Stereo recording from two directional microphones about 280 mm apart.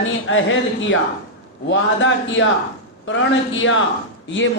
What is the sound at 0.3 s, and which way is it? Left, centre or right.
Speech, left.